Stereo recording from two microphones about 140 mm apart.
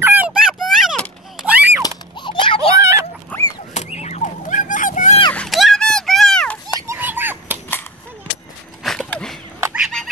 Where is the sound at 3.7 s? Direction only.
55° left (ahead or behind).